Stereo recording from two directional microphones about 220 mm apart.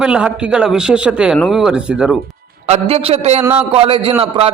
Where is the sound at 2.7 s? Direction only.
30° right (ahead or behind).